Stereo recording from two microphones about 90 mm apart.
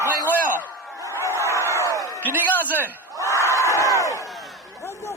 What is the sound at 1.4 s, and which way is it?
Crowd, 30° right (ahead or behind).